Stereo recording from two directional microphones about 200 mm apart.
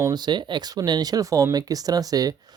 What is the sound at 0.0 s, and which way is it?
Speech, 20° right (ahead or behind).